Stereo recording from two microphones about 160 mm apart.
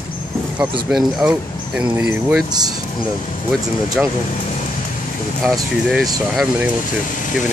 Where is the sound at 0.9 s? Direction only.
5° right (ahead or behind).